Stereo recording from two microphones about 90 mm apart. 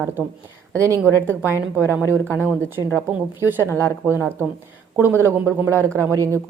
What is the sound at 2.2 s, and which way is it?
Speech, 20° left (ahead or behind).